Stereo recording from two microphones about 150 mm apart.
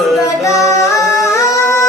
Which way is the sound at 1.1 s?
20° left (ahead or behind).